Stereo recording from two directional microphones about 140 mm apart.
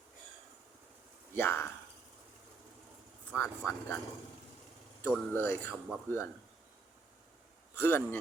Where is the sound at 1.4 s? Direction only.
15° left (ahead or behind).